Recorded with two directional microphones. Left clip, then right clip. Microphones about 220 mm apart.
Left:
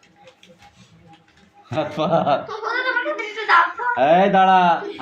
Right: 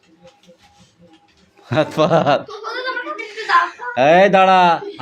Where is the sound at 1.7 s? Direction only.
40° right (ahead or behind).